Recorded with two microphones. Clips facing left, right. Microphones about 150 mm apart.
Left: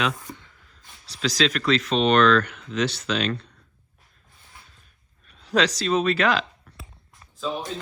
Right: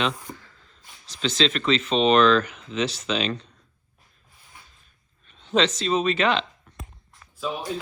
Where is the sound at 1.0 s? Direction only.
35° left (ahead or behind).